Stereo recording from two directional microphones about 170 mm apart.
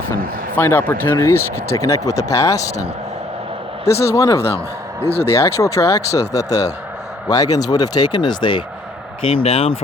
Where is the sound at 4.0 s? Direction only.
15° left (ahead or behind); by 9.7 s 35° left (ahead or behind).